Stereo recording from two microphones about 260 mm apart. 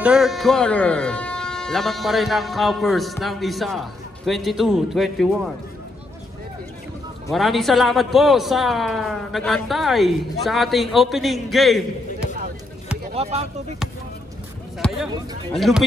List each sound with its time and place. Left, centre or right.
0.0 s speech: centre
7.3 s speech: centre
13.1 s speech: right
15.5 s speech: centre